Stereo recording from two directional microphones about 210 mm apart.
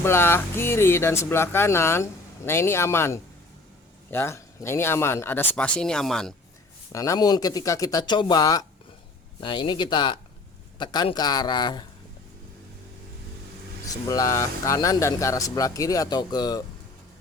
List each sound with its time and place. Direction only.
0.0 s speech: 10° left (ahead or behind)
6.9 s a man's voice: 15° left (ahead or behind)
13.8 s speech: 15° left (ahead or behind)